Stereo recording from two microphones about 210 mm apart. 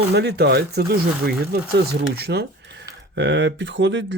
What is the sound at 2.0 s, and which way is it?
Speech, 50° right (ahead or behind).